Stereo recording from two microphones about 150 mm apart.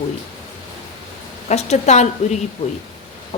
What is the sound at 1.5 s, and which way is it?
Speech, 50° left (ahead or behind).